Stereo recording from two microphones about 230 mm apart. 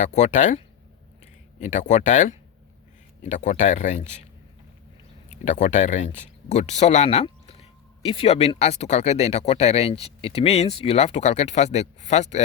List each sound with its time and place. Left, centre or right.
0.0 s speech: left
1.6 s speech: left
5.5 s speech: left